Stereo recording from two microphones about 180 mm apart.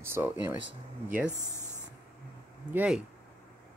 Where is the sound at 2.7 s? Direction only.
10° right (ahead or behind).